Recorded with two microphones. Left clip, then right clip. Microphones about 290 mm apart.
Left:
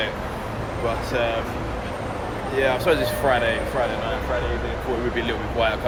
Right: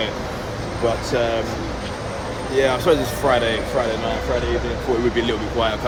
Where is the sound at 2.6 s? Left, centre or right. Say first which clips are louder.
Right 2 dB; centre.